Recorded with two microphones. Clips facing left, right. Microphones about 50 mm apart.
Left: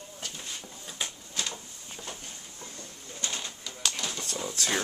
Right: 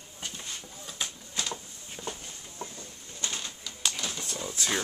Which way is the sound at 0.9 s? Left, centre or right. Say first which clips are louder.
Even; centre.